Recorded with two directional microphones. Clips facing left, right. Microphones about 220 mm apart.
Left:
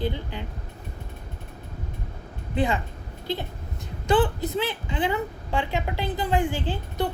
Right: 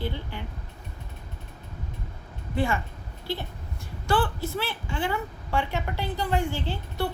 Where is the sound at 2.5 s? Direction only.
20° left (ahead or behind).